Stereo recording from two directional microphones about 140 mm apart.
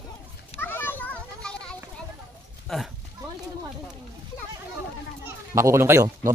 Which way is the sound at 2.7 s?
5° left (ahead or behind).